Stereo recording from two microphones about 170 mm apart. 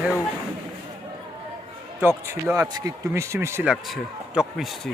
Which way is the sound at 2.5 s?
20° right (ahead or behind).